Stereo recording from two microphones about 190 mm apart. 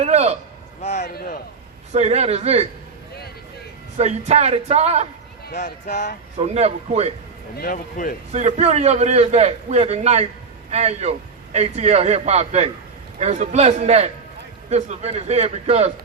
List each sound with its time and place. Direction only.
0.0 s a man's voice: 35° right (ahead or behind)
0.8 s speech: 35° left (ahead or behind)
1.0 s a man's voice: 55° left (ahead or behind)
1.9 s a man's voice: 35° right (ahead or behind)
3.9 s a man's voice: 35° right (ahead or behind)
5.5 s speech: 40° left (ahead or behind)
6.4 s a man's voice: 35° right (ahead or behind)
7.6 s a man's voice: 45° left (ahead or behind)
8.3 s a man's voice: 35° right (ahead or behind)